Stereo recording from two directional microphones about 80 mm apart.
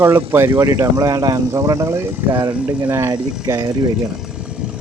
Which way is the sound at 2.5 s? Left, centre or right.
Centre.